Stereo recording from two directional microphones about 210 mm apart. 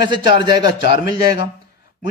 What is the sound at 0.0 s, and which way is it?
Speech, 20° right (ahead or behind).